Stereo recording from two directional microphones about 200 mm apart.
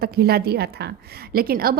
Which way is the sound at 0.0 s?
50° right (ahead or behind).